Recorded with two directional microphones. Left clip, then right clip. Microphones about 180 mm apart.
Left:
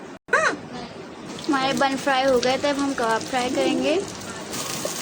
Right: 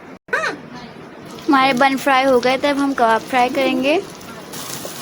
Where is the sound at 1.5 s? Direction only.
40° right (ahead or behind).